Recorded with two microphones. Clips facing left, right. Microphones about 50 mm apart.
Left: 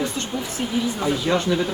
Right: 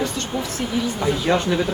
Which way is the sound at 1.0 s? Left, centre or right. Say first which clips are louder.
Right 2 dB; centre.